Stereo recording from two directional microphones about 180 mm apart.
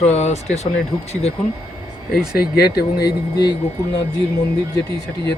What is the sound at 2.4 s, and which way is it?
Speech, 60° left (ahead or behind).